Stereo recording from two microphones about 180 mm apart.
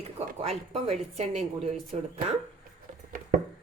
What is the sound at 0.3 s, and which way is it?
Speech, 35° right (ahead or behind).